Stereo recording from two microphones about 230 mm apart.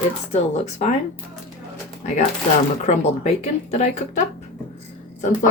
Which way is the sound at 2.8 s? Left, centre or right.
Left.